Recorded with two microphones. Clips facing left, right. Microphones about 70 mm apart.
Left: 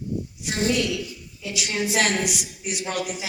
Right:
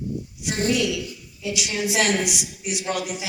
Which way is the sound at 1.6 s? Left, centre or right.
Left.